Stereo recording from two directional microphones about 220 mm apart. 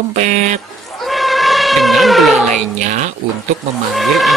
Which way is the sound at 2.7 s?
35° right (ahead or behind).